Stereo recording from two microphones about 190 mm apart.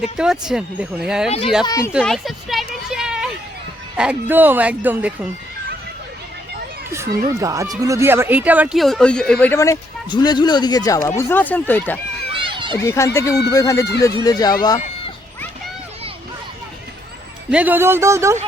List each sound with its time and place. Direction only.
0.2 s speech: 5° right (ahead or behind)
1.6 s speech: 20° left (ahead or behind)
1.9 s a sound: 5° right (ahead or behind)
3.9 s speech: 5° right (ahead or behind)
7.3 s speech: 15° right (ahead or behind); by 11.9 s 10° left (ahead or behind)
12.3 s run: 25° right (ahead or behind)
12.8 s speech: 15° left (ahead or behind)
14.6 s a sound: 20° left (ahead or behind)
17.5 s speech: 10° right (ahead or behind)